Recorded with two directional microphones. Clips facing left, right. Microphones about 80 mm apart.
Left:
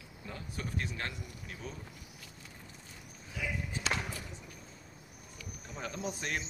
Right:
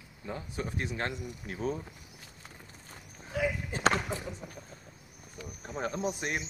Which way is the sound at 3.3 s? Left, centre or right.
Right.